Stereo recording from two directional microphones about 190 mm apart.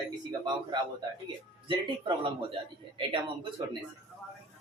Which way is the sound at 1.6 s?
25° right (ahead or behind).